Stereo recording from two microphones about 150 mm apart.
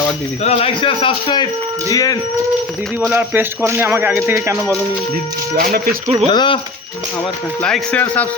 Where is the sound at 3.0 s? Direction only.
10° right (ahead or behind).